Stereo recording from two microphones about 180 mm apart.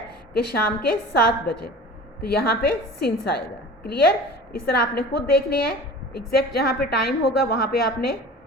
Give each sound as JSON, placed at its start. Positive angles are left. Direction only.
{"t": 0.3, "sound": "a woman's voice", "side_deg": 60}